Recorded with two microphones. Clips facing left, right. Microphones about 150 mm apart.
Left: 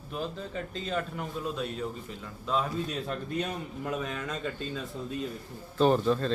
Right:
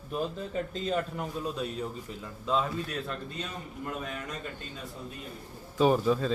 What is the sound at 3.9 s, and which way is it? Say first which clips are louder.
Speech: left 4 dB; 90° left.